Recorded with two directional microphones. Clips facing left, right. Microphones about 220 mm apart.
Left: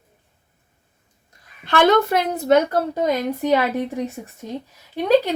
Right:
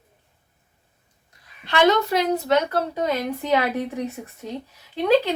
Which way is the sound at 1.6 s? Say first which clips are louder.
Left 3 dB; 55° left (ahead or behind).